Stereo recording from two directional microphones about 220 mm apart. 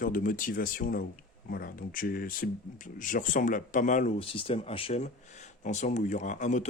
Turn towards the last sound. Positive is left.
turn(degrees=35)  # may be behind; listen again after turning